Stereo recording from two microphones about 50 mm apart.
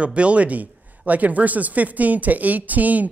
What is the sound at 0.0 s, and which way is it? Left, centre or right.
Speech, right.